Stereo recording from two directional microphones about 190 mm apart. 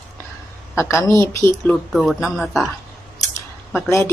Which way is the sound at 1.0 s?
15° left (ahead or behind).